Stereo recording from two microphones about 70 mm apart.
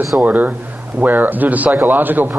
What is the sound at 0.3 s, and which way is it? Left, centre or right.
Speech, right.